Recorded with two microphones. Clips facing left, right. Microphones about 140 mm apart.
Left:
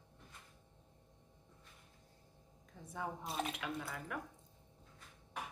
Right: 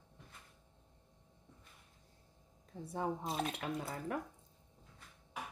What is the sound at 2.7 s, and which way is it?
Speech, 35° right (ahead or behind).